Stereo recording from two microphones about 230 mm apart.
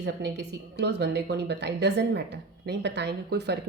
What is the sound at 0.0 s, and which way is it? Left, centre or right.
A woman's voice, right.